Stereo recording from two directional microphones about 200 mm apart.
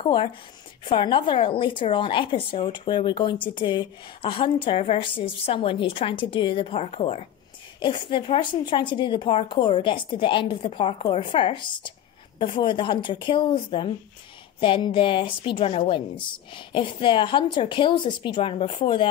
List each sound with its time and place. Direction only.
0.0 s a woman's voice: 25° left (ahead or behind)